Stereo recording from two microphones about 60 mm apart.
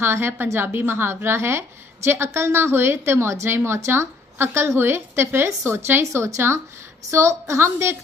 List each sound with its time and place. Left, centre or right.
0.0 s a woman's voice: right